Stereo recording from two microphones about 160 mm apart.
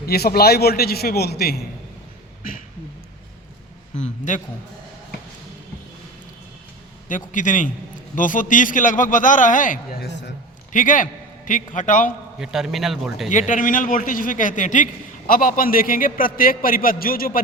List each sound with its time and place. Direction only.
0.0 s a man's voice: 75° left (ahead or behind)
3.9 s a man's voice: 50° left (ahead or behind)
7.1 s a man's voice: 55° left (ahead or behind); by 10.3 s 80° left
10.7 s a man's voice: 55° left (ahead or behind)
12.4 s a man's voice: 5° right (ahead or behind)
13.5 s a man's voice: 55° left (ahead or behind)